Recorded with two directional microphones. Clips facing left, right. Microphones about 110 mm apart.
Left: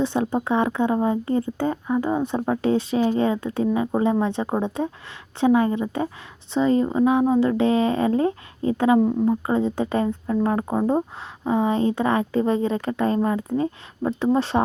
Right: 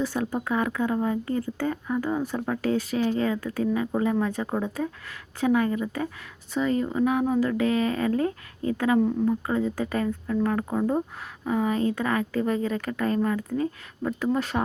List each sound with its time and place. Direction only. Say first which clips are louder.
0.0 s speech: left 5 dB; 25° left (ahead or behind)